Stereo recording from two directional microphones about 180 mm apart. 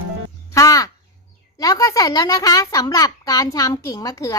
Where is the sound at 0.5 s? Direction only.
20° left (ahead or behind).